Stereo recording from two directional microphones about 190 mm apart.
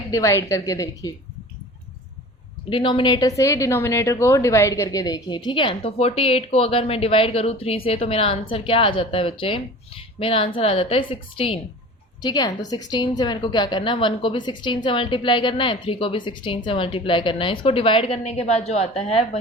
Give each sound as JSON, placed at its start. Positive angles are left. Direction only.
{"t": 0.1, "sound": "a woman's voice", "side_deg": 15}
{"t": 2.6, "sound": "a woman's voice", "side_deg": 25}